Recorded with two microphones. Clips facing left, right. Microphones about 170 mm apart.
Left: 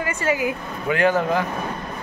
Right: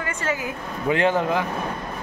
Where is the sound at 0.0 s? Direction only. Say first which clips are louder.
Left 5 dB; 10° left (ahead or behind).